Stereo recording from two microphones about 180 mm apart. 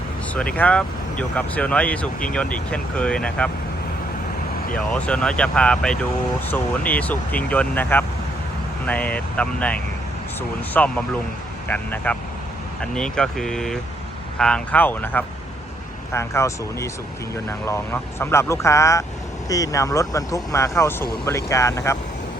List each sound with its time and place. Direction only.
0.3 s speech: 5° left (ahead or behind)
5.0 s speech: 5° left (ahead or behind)